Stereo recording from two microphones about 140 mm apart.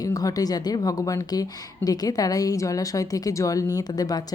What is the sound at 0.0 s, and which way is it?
A woman's voice, 25° left (ahead or behind).